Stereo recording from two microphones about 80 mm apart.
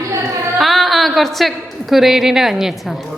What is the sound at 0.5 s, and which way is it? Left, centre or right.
A woman's voice, centre.